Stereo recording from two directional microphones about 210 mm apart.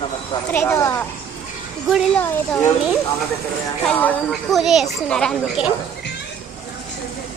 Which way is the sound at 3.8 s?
Centre (ahead or behind).